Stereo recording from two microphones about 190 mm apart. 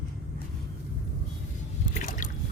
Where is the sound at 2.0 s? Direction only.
45° left (ahead or behind).